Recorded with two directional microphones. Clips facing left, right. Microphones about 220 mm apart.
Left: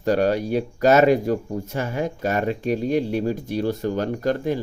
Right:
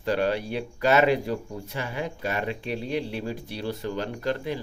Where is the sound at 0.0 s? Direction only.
45° left (ahead or behind).